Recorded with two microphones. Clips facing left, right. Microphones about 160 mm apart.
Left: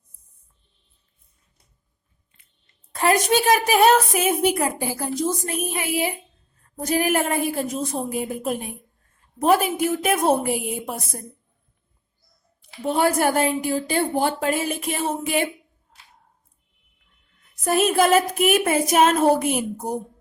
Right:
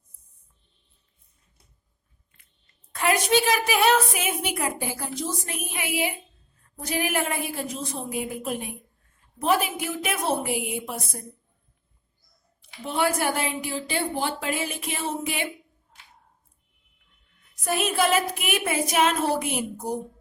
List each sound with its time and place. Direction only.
2.3 s a sound: 20° left (ahead or behind)
2.9 s a woman's voice: 40° left (ahead or behind)
12.8 s a woman's voice: 45° left (ahead or behind)
17.6 s a woman's voice: 45° left (ahead or behind)